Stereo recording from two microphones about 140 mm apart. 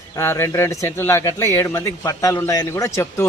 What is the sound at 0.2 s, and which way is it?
Speech, 20° left (ahead or behind).